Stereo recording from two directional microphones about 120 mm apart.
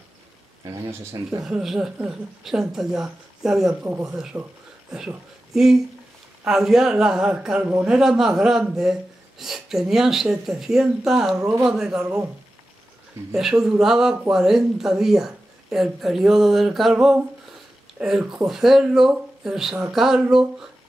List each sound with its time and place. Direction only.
0.7 s speech: 30° right (ahead or behind)
1.4 s speech: 5° right (ahead or behind)
13.3 s speech: 5° right (ahead or behind)
17.9 s speech: 5° right (ahead or behind)